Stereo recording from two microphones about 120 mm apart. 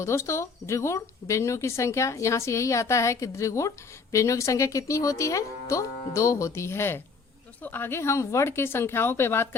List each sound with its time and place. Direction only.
0.0 s speech: 25° left (ahead or behind)